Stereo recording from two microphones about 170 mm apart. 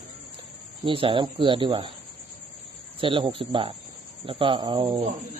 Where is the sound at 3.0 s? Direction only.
30° right (ahead or behind).